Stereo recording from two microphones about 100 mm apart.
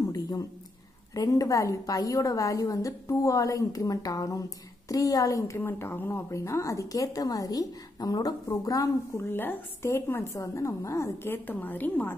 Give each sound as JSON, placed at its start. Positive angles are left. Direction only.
{"t": 0.0, "sound": "a sound", "side_deg": 35}
{"t": 1.1, "sound": "a woman's voice", "side_deg": 35}
{"t": 5.6, "sound": "a woman's voice", "side_deg": 25}
{"t": 9.3, "sound": "a woman's voice", "side_deg": 20}